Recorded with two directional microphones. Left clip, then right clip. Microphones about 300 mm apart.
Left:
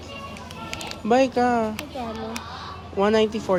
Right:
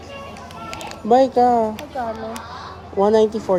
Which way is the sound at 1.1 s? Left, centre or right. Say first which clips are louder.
Right 5 dB; centre.